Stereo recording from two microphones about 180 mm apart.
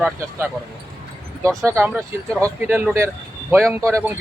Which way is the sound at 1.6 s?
15° right (ahead or behind).